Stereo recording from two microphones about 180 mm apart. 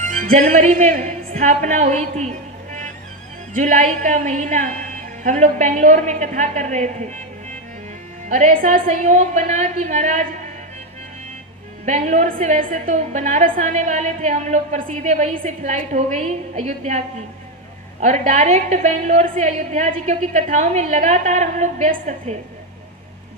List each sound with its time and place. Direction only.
0.0 s speech: 45° right (ahead or behind)
3.6 s a woman's voice: 40° right (ahead or behind)
8.3 s a woman's voice: 40° right (ahead or behind)
11.9 s a woman's voice: 40° right (ahead or behind)
18.0 s a woman's voice: 40° right (ahead or behind)